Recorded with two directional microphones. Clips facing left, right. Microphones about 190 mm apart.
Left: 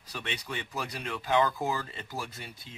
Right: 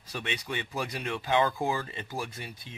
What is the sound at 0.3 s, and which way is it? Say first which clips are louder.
Speech: right 2 dB; 15° right (ahead or behind).